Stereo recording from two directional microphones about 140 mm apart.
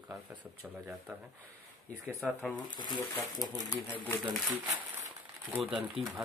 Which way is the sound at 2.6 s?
30° left (ahead or behind).